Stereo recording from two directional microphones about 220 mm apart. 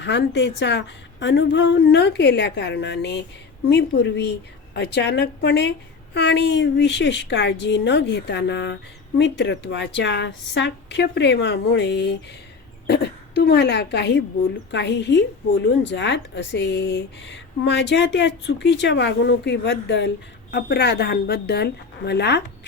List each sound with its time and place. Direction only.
0.0 s a woman's voice: 50° left (ahead or behind)